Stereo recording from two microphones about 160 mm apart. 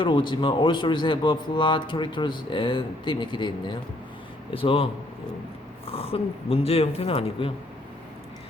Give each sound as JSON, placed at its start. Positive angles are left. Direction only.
{"t": 0.0, "sound": "speech", "side_deg": 30}